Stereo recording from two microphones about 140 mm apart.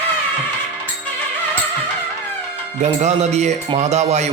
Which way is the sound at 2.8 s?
55° right (ahead or behind).